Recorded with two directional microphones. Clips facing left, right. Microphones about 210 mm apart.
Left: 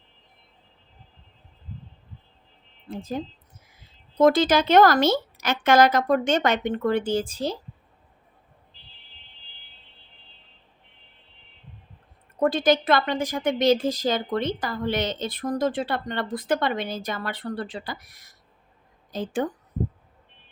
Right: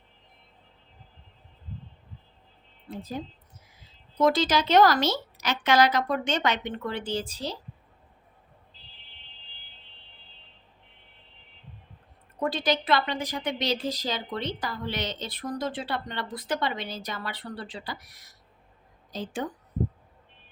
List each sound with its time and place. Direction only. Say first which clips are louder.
2.9 s a woman's voice: left 4 dB; 45° left (ahead or behind)
12.4 s a woman's voice: left 6 dB; 50° left (ahead or behind)